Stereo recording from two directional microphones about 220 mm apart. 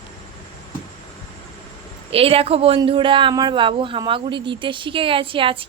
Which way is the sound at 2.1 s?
25° right (ahead or behind).